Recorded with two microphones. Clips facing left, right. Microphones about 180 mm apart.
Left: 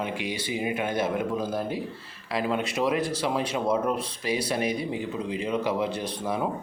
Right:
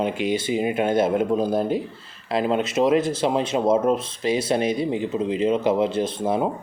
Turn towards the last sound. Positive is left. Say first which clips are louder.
# right 7 dB
turn(degrees=-25)  # may be behind; listen again after turning